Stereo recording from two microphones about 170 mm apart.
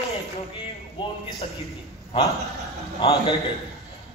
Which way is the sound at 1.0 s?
30° left (ahead or behind).